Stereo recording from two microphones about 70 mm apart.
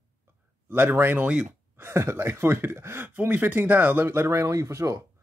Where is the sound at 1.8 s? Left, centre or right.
Right.